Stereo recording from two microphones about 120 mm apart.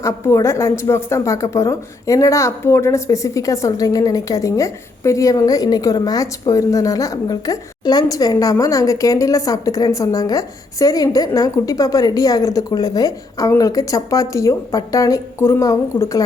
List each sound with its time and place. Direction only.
0.0 s a woman's voice: 25° left (ahead or behind)